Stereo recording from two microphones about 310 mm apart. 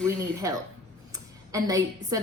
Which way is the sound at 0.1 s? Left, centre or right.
Centre.